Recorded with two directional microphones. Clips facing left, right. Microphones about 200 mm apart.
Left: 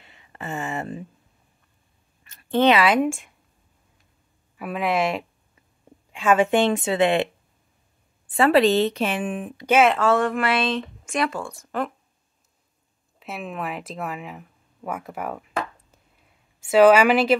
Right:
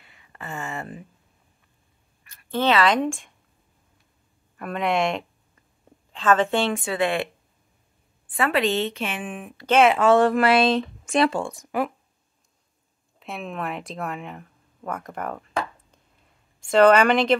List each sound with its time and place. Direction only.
0.0 s a sound: 25° left (ahead or behind)
2.2 s a woman's voice: 20° left (ahead or behind)
4.6 s a woman's voice: 5° left (ahead or behind); by 7.2 s 20° left (ahead or behind)
8.4 s a woman's voice: 35° left (ahead or behind)
9.7 s a woman's voice: 5° left (ahead or behind)
9.9 s speech: 20° right (ahead or behind)
10.2 s speech: 40° right (ahead or behind)
11.5 s speech: 10° right (ahead or behind)
13.2 s a woman's voice: 5° left (ahead or behind)